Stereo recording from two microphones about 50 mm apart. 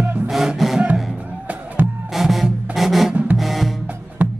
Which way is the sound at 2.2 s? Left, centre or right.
Centre.